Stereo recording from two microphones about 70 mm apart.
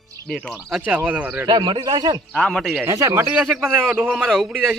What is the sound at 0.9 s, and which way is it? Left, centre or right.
Speech, centre.